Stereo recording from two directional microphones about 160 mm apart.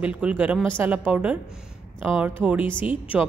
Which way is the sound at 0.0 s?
10° right (ahead or behind).